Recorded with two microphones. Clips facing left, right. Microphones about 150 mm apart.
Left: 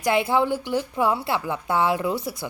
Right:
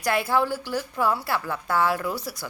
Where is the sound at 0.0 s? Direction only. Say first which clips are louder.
Left 3 dB; 20° left (ahead or behind).